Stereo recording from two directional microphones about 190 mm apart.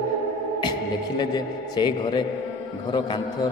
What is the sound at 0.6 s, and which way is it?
A man's voice, 25° left (ahead or behind).